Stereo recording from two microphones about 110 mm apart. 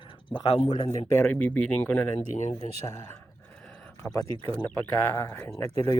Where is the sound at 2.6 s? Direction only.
90° left.